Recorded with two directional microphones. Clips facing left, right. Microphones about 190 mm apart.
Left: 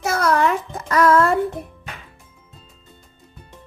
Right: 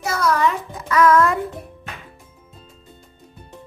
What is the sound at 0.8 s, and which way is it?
Music, 40° left (ahead or behind).